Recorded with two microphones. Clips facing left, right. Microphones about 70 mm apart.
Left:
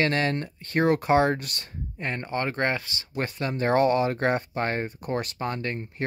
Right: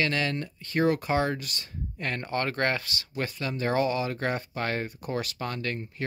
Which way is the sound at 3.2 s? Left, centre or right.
Left.